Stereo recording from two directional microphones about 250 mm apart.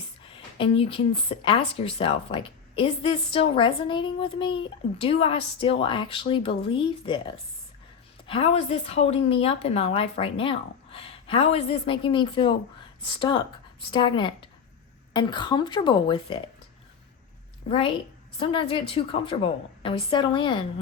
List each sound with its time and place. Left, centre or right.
0.3 s speech: left
8.3 s speech: left
17.7 s speech: left